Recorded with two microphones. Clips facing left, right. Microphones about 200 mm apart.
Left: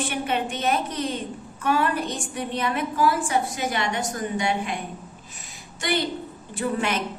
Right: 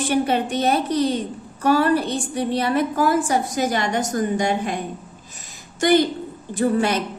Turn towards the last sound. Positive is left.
turn(degrees=-40)  # may be behind; listen again after turning